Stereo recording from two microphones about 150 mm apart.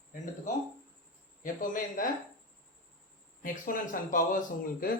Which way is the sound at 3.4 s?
65° left (ahead or behind).